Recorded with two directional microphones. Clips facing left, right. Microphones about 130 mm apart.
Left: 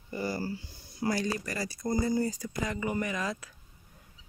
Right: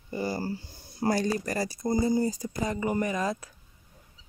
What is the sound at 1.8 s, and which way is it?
Speech, 25° right (ahead or behind).